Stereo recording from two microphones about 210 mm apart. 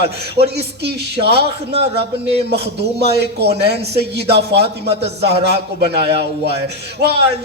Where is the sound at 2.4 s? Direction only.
50° right (ahead or behind).